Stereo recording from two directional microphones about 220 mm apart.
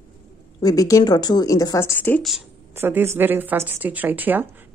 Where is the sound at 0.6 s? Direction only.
15° left (ahead or behind).